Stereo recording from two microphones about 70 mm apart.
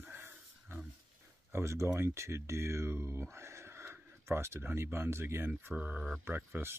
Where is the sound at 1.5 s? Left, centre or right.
Right.